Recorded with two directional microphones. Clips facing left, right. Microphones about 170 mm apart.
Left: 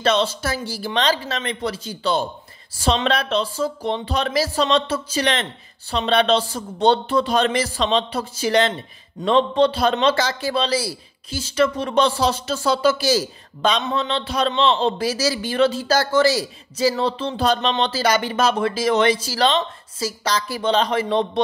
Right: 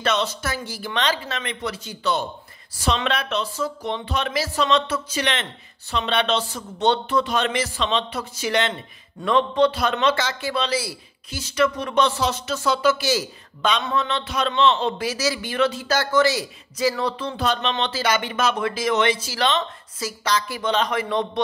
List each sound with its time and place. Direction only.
0.0 s a man's voice: 30° left (ahead or behind)